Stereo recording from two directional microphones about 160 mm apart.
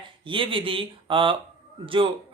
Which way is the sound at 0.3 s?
30° right (ahead or behind).